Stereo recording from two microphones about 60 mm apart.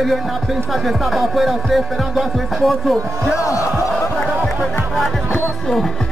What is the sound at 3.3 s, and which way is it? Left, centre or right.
Speech, left.